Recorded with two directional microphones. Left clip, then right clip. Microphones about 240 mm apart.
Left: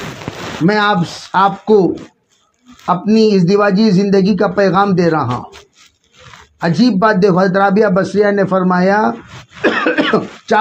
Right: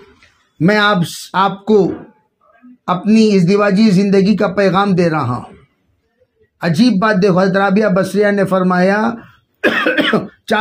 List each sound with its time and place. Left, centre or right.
0.7 s a man's voice: right
6.6 s a man's voice: right